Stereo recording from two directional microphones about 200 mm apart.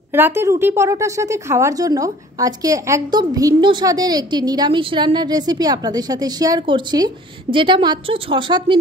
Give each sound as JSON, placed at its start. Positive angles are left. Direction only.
{"t": 0.1, "sound": "a woman's voice", "side_deg": -10}